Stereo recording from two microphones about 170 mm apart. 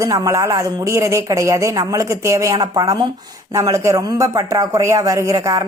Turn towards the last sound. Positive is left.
turn(degrees=-20)  # may be behind; listen again after turning